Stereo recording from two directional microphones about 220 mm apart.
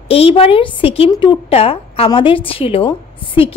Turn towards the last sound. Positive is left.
turn(degrees=25)  # may be behind; listen again after turning